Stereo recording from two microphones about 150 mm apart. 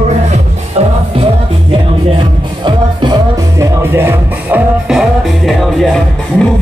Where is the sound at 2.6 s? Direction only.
30° right (ahead or behind).